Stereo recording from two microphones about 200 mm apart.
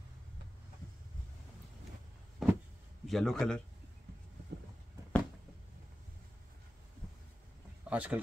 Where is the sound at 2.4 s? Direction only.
Centre (ahead or behind).